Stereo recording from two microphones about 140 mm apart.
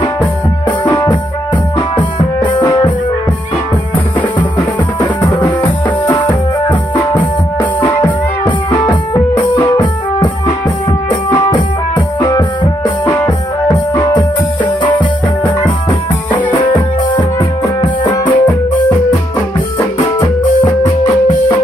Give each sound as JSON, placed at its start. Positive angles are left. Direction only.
{"t": 2.0, "sound": "music", "side_deg": 35}
{"t": 6.0, "sound": "music", "side_deg": 30}
{"t": 7.8, "sound": "music", "side_deg": 30}
{"t": 17.8, "sound": "music", "side_deg": 35}